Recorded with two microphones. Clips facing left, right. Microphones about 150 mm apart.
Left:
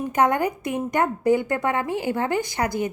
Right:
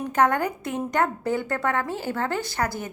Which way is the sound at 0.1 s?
15° left (ahead or behind).